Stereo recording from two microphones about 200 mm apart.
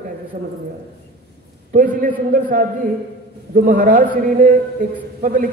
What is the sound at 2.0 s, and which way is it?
A man's voice, 40° right (ahead or behind).